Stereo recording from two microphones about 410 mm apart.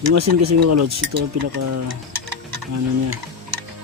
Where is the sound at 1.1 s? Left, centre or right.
Right.